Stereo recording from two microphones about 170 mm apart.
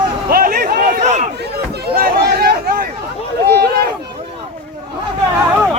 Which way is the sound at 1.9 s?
60° right (ahead or behind).